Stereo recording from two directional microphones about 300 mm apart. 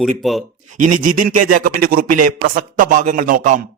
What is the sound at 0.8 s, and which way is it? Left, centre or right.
A man's voice, right.